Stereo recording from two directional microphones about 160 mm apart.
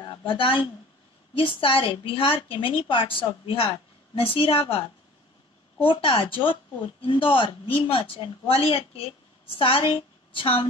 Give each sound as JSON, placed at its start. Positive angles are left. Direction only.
{"t": 0.0, "sound": "speech", "side_deg": 30}
{"t": 5.8, "sound": "a woman's voice", "side_deg": 35}